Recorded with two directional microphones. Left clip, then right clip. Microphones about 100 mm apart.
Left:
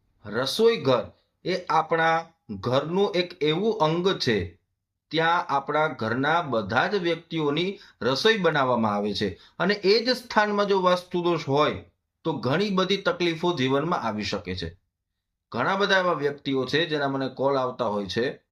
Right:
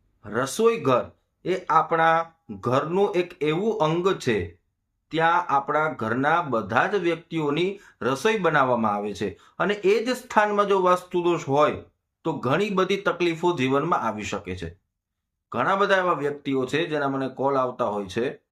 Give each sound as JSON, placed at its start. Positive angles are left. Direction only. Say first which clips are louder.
{"t": 0.5, "sound": "speech", "louder": "even", "side_deg": -30}
{"t": 3.9, "sound": "speech", "louder": "right 1 dB", "side_deg": -40}
{"t": 5.1, "sound": "speech", "louder": "right 2 dB", "side_deg": -20}
{"t": 5.4, "sound": "speech", "louder": "right 3 dB", "side_deg": -35}
{"t": 5.6, "sound": "speech", "louder": "right 1 dB", "side_deg": -20}
{"t": 12.2, "sound": "speech", "louder": "right 2 dB", "side_deg": -35}
{"t": 12.7, "sound": "speech", "louder": "right 1 dB", "side_deg": -20}